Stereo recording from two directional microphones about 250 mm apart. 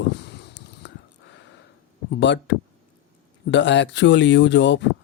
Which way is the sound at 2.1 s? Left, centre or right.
Left.